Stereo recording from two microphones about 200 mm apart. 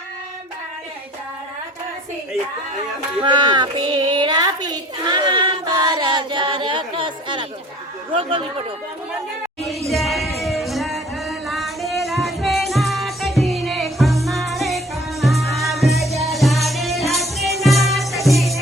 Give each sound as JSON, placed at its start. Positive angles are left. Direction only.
{"t": 3.2, "sound": "child singing", "side_deg": -20}
{"t": 8.1, "sound": "speech", "side_deg": -25}
{"t": 9.6, "sound": "singing", "side_deg": 0}
{"t": 15.2, "sound": "music", "side_deg": 0}